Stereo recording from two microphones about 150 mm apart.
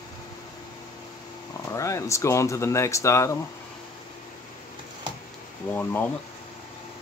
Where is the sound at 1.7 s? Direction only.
20° left (ahead or behind).